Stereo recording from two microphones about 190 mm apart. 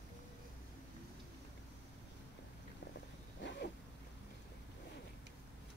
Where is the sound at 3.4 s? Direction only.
65° left (ahead or behind).